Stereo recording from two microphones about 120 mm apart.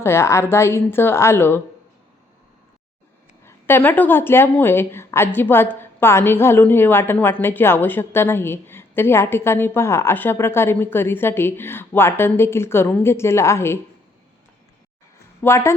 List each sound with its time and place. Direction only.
0.0 s a woman's voice: 20° left (ahead or behind)
3.4 s a woman's voice: 20° left (ahead or behind)
15.4 s a woman's voice: 20° left (ahead or behind)